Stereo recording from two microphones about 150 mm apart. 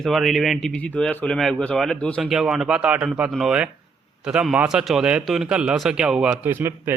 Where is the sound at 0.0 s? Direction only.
Centre (ahead or behind).